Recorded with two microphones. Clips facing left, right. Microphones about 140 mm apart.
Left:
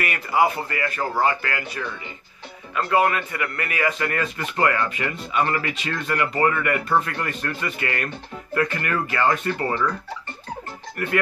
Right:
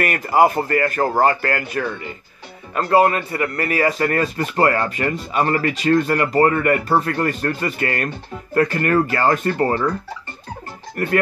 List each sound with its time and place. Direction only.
0.0 s a man's voice: 45° right (ahead or behind)
11.0 s speech: 40° right (ahead or behind)